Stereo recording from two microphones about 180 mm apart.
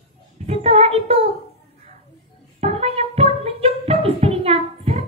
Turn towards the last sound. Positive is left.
turn(degrees=-35)  # may be behind; listen again after turning